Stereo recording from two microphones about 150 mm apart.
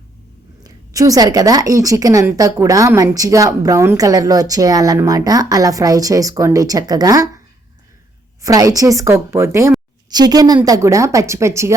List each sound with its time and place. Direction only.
0.6 s a woman's voice: 25° right (ahead or behind)
8.4 s a woman's voice: 25° right (ahead or behind)